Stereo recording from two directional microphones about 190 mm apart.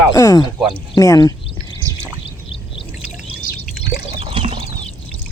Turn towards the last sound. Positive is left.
turn(degrees=-30)  # may be behind; listen again after turning